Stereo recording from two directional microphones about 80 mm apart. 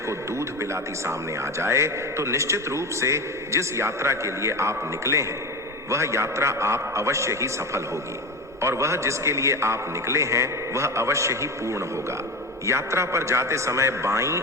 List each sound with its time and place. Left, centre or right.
0.1 s a man's voice: right